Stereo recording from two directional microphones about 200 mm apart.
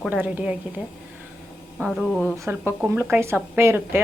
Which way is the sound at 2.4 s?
10° right (ahead or behind).